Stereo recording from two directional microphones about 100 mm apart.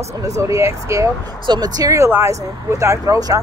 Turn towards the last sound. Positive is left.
turn(degrees=-35)  # may be behind; listen again after turning